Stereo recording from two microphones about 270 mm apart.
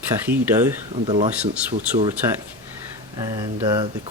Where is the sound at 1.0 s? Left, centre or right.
Centre.